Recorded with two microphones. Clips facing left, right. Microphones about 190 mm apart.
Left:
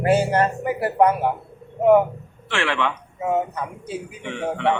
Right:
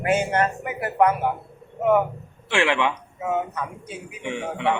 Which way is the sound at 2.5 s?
15° right (ahead or behind).